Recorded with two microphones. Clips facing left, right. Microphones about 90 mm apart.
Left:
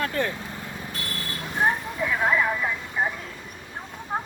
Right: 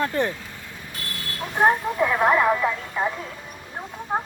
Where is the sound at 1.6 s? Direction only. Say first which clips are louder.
Right 6 dB; 55° right (ahead or behind).